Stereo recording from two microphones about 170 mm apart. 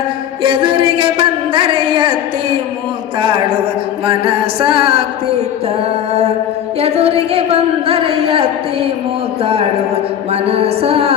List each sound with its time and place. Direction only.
0.4 s a woman's voice: 30° right (ahead or behind)
3.2 s a sound: 30° right (ahead or behind)
4.0 s a woman's voice: 35° right (ahead or behind)
6.7 s a woman's voice: 35° right (ahead or behind)